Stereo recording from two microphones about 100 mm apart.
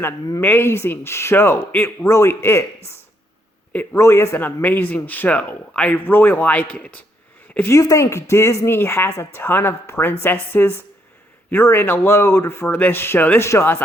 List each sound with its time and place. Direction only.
0.3 s speech: 25° left (ahead or behind)
3.9 s a man's voice: 30° left (ahead or behind); by 7.0 s 15° left (ahead or behind)
7.7 s speech: 35° left (ahead or behind)